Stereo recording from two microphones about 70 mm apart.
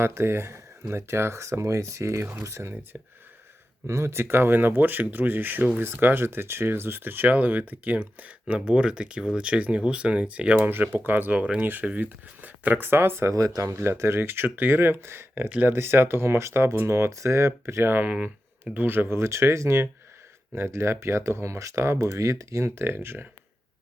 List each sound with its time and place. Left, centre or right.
0.0 s speech: right
13.3 s speech: right